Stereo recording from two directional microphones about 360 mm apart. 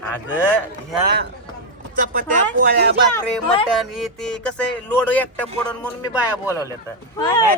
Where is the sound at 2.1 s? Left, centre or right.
Right.